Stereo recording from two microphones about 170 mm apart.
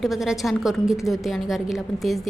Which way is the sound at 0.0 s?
Centre (ahead or behind).